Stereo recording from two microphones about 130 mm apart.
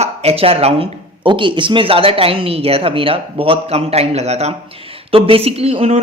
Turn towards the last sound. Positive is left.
turn(degrees=-55)  # may be behind; listen again after turning